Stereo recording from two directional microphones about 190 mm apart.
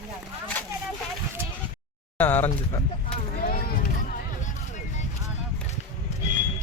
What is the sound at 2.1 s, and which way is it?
Speech, 10° left (ahead or behind).